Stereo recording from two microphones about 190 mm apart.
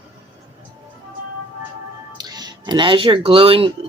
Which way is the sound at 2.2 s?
20° right (ahead or behind).